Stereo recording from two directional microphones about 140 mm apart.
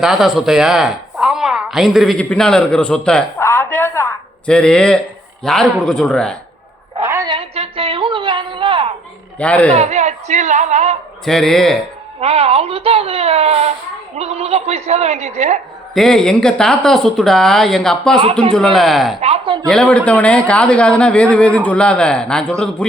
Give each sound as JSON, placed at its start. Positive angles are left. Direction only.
{"t": 0.0, "sound": "speech", "side_deg": 0}
{"t": 3.3, "sound": "a sound", "side_deg": 20}
{"t": 4.4, "sound": "speech", "side_deg": 5}
{"t": 7.0, "sound": "a sound", "side_deg": -15}
{"t": 7.3, "sound": "a sound", "side_deg": -40}
{"t": 9.4, "sound": "speech", "side_deg": 10}
{"t": 9.7, "sound": "a woman's voice", "side_deg": -55}
{"t": 11.3, "sound": "speech", "side_deg": 0}
{"t": 12.2, "sound": "speech", "side_deg": -45}
{"t": 16.0, "sound": "speech", "side_deg": 5}
{"t": 19.2, "sound": "speech", "side_deg": -45}
{"t": 19.6, "sound": "speech", "side_deg": 5}